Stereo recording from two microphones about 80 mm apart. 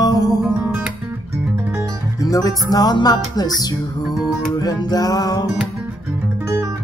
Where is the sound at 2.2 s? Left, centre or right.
Left.